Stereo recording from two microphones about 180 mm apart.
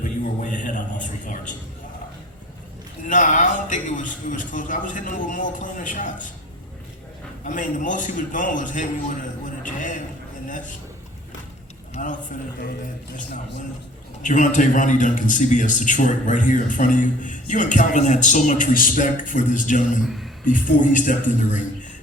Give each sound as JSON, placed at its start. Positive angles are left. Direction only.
{"t": 0.0, "sound": "a sound", "side_deg": 45}
{"t": 1.2, "sound": "a man's voice", "side_deg": 45}
{"t": 3.0, "sound": "a man's voice", "side_deg": 45}
{"t": 7.4, "sound": "a man's voice", "side_deg": 45}
{"t": 9.6, "sound": "a sound", "side_deg": 45}
{"t": 12.0, "sound": "a man's voice", "side_deg": 45}
{"t": 14.2, "sound": "a man's voice", "side_deg": 45}
{"t": 20.1, "sound": "speech", "side_deg": 0}
{"t": 20.4, "sound": "a man's voice", "side_deg": 45}